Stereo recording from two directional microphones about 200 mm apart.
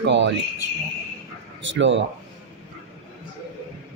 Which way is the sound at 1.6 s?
65° right (ahead or behind).